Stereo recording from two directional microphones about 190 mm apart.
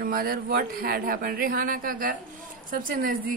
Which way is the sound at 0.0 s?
50° right (ahead or behind).